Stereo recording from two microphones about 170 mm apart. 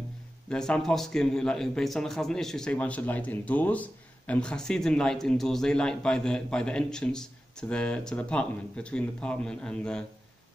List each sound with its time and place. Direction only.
0.5 s a man's voice: 5° left (ahead or behind)